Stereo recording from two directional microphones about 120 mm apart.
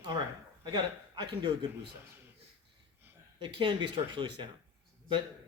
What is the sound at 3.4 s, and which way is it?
Speech, 45° right (ahead or behind).